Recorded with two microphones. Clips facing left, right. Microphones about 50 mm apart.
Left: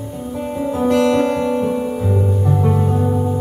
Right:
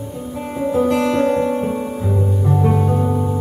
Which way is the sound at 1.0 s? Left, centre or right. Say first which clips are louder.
Left 1 dB; left.